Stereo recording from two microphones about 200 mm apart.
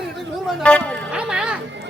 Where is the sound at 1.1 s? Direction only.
5° right (ahead or behind).